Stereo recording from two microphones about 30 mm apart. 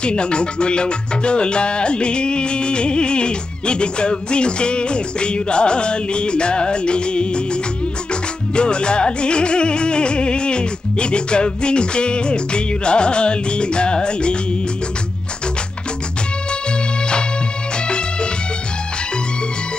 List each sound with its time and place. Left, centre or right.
0.0 s speech: left
17.8 s music: left